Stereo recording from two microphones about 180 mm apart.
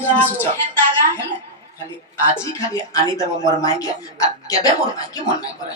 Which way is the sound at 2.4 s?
15° left (ahead or behind).